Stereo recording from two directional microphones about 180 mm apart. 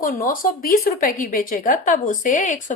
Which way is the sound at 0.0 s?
50° left (ahead or behind).